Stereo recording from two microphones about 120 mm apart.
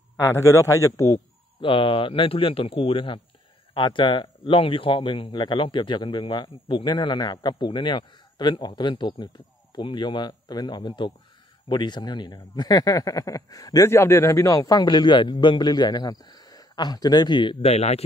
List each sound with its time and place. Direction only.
0.2 s a man's voice: 25° left (ahead or behind)
1.6 s a man's voice: 45° left (ahead or behind)
17.6 s speech: 65° left (ahead or behind)